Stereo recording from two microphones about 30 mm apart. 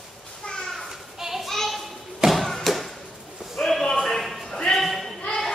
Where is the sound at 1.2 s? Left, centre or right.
Centre.